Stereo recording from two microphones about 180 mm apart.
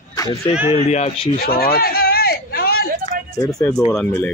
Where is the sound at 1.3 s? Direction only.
55° left (ahead or behind).